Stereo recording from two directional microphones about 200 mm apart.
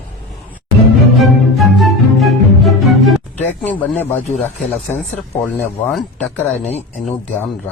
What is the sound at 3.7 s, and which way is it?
Speech, 10° left (ahead or behind).